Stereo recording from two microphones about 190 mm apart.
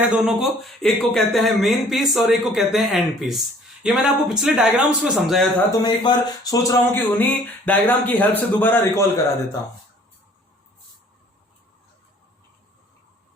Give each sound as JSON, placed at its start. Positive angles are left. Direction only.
{"t": 0.1, "sound": "a man's voice", "side_deg": -5}
{"t": 5.8, "sound": "speech", "side_deg": 20}